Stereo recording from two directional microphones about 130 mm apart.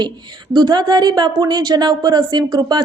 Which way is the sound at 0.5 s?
35° right (ahead or behind).